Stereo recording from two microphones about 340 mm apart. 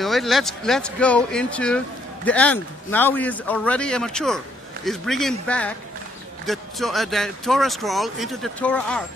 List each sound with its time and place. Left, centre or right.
0.0 s speech: centre